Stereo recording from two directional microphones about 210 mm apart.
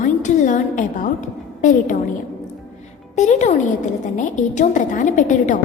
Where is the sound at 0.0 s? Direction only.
35° left (ahead or behind).